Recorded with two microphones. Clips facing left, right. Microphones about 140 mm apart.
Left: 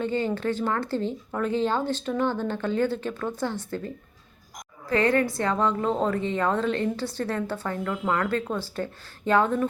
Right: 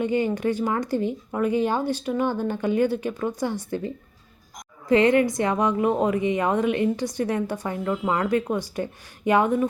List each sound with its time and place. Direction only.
0.0 s a woman's voice: 15° right (ahead or behind)